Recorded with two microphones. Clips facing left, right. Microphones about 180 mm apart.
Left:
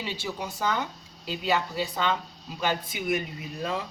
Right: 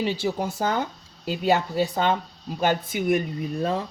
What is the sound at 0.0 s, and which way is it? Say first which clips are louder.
Speech: right 8 dB; 35° right (ahead or behind).